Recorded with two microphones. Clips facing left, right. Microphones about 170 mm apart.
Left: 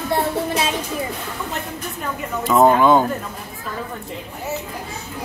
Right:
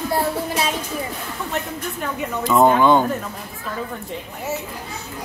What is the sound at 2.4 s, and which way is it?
Speech, centre (ahead or behind).